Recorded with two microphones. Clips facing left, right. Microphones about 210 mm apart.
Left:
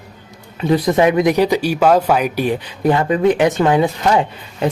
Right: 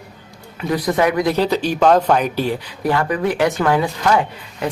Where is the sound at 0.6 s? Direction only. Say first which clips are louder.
Left 4 dB; 25° left (ahead or behind).